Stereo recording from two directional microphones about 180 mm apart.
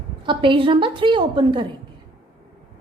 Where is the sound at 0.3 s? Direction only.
30° right (ahead or behind).